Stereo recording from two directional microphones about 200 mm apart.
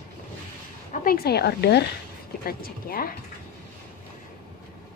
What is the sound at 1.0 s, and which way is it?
Speech, 50° left (ahead or behind).